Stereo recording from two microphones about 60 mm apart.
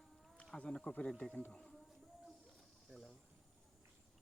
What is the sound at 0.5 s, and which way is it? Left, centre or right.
Speech, centre.